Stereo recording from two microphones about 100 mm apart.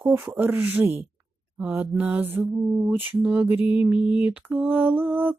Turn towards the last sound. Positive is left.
turn(degrees=-20)  # may be behind; listen again after turning